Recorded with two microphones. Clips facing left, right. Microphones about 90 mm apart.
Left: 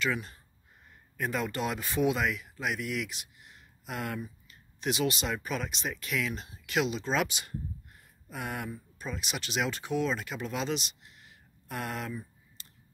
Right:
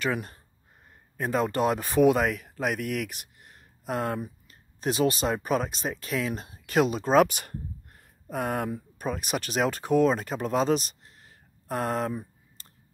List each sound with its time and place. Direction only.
0.0 s speech: 40° right (ahead or behind)
8.6 s speech: 55° right (ahead or behind); by 12.2 s 40° right (ahead or behind)
12.6 s a sound: 40° right (ahead or behind)